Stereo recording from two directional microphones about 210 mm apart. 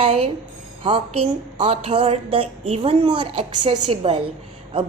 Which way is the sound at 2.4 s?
90° right.